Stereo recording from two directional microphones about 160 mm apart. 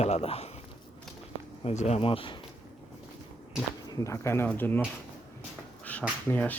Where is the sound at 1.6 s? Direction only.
45° left (ahead or behind).